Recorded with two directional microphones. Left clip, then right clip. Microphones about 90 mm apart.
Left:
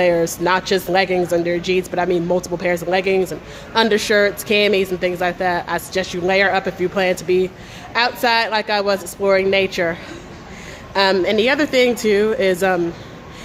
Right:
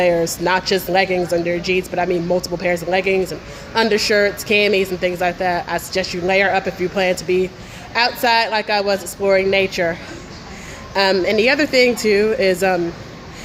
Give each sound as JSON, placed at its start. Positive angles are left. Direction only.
{"t": 0.0, "sound": "a woman's voice", "side_deg": 25}